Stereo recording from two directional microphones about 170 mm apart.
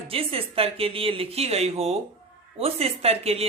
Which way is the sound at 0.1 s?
35° right (ahead or behind).